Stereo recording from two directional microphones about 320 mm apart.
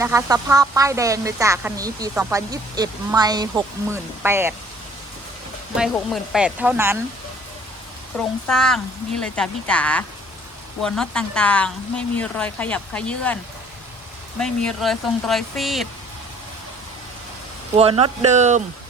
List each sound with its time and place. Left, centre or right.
0.0 s a woman's voice: centre
6.3 s a woman's voice: centre
8.1 s a woman's voice: centre
17.7 s speech: centre